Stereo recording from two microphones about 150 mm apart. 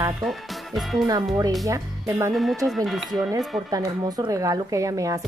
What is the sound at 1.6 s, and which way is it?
Speech, 20° right (ahead or behind).